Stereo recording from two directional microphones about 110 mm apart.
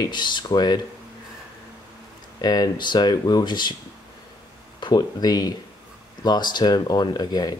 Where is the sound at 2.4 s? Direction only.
35° left (ahead or behind).